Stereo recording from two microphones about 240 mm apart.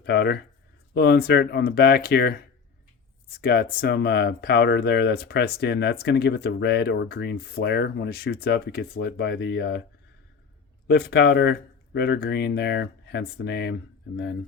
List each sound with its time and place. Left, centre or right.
0.0 s speech: left
10.8 s speech: left